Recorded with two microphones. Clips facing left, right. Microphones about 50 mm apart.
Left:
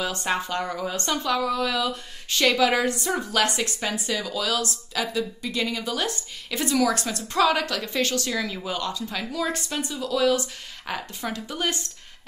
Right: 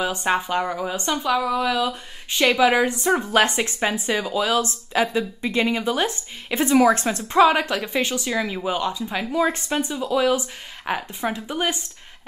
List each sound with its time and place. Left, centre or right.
0.0 s speech: centre